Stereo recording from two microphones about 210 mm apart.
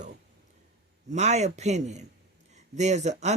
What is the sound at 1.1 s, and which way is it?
Speech, 35° right (ahead or behind).